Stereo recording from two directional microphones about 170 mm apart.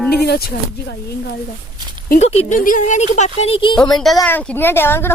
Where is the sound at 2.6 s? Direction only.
50° left (ahead or behind); by 3.8 s 30° left (ahead or behind).